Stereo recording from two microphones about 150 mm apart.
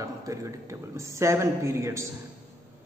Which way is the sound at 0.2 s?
20° right (ahead or behind).